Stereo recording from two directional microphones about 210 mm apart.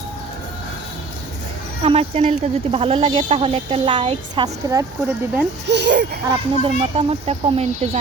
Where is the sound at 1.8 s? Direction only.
30° right (ahead or behind); by 5.5 s 10° right (ahead or behind).